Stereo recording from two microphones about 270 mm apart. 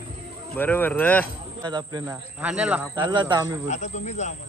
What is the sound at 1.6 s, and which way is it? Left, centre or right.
Speech, centre.